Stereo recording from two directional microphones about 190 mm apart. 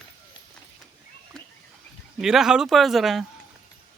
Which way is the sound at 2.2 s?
5° right (ahead or behind).